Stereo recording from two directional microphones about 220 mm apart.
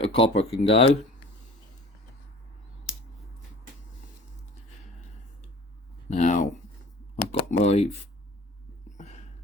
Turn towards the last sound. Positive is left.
turn(degrees=30)  # may be behind; listen again after turning